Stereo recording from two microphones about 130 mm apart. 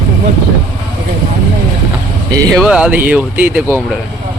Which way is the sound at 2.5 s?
5° right (ahead or behind).